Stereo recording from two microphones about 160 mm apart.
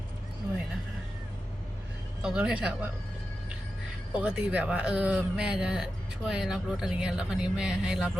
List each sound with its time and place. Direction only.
2.2 s speech: 5° right (ahead or behind)
4.1 s speech: 5° right (ahead or behind)